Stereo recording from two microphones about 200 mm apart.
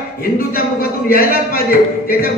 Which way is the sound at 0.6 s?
45° left (ahead or behind).